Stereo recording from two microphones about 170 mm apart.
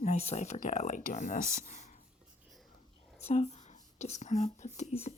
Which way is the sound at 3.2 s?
40° left (ahead or behind).